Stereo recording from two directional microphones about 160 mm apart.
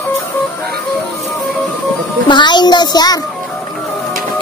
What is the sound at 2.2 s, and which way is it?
Speech, 30° left (ahead or behind).